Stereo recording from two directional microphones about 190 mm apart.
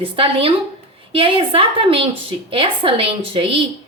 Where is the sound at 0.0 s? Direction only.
30° right (ahead or behind).